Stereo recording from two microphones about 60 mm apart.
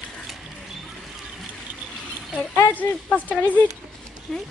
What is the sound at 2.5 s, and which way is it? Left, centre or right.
Speech, left.